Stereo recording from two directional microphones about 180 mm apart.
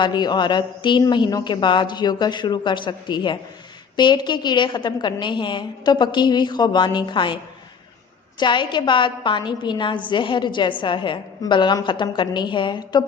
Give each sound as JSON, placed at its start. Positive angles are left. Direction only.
{"t": 0.0, "sound": "a woman's voice", "side_deg": 25}
{"t": 8.4, "sound": "a woman's voice", "side_deg": 25}